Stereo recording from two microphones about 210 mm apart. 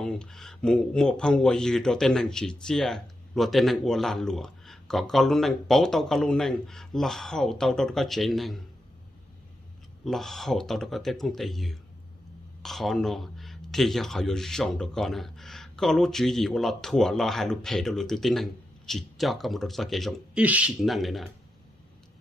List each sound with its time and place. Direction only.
0.0 s speech: 5° left (ahead or behind)
10.0 s speech: centre (ahead or behind)